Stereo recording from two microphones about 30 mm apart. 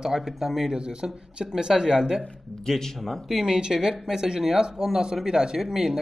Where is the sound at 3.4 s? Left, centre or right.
Right.